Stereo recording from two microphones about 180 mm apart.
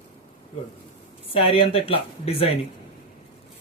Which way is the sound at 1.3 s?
30° left (ahead or behind).